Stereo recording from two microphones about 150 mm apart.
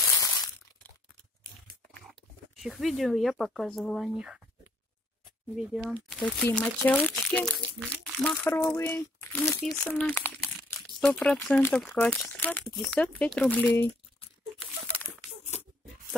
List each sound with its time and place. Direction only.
0.0 s a sound: 20° left (ahead or behind)
2.5 s speech: centre (ahead or behind)
5.6 s speech: 5° right (ahead or behind)
8.5 s speech: 15° left (ahead or behind)